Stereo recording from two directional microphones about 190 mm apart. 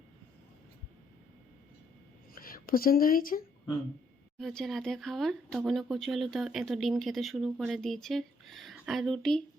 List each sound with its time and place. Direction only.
2.3 s speech: 50° left (ahead or behind)
4.4 s speech: centre (ahead or behind)